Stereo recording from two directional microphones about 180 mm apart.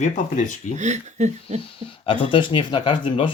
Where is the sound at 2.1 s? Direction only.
30° left (ahead or behind).